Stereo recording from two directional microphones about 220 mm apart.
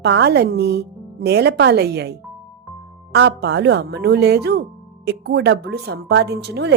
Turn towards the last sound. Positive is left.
turn(degrees=-50)  # may be behind; listen again after turning